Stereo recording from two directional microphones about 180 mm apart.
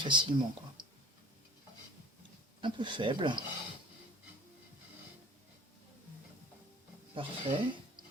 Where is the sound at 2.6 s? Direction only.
25° right (ahead or behind).